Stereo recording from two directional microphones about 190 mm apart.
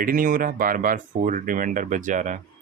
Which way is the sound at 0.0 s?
50° right (ahead or behind).